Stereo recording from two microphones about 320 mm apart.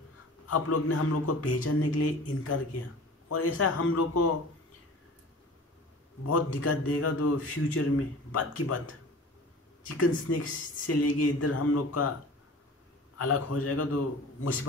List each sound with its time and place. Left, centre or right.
0.5 s speech: left
6.2 s speech: left
9.8 s speech: left
13.2 s speech: left